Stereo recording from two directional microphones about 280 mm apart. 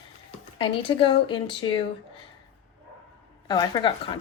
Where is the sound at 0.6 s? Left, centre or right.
Centre.